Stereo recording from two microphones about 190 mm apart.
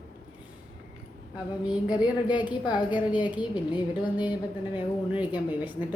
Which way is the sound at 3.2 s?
5° right (ahead or behind).